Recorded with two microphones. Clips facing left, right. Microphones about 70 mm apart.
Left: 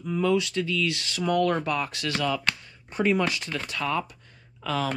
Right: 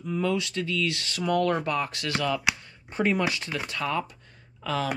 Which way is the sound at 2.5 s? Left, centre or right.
Centre.